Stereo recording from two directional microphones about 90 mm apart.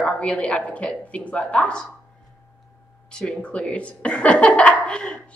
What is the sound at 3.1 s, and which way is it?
Speech, 10° left (ahead or behind).